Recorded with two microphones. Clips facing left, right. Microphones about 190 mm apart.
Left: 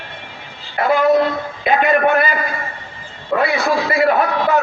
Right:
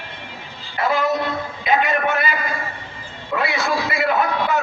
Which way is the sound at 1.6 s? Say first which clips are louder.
Left 5 dB; 50° left (ahead or behind).